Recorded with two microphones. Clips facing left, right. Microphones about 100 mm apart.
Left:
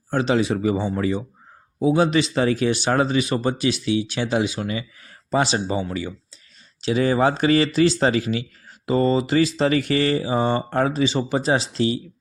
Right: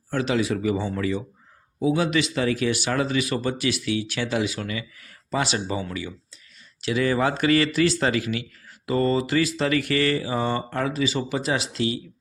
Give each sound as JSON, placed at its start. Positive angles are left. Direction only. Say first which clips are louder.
{"t": 0.1, "sound": "speech", "louder": "left 3 dB", "side_deg": 30}